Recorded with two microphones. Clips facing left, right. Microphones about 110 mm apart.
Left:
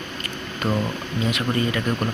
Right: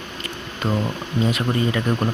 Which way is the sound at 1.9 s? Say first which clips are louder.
Right 2 dB; 20° right (ahead or behind).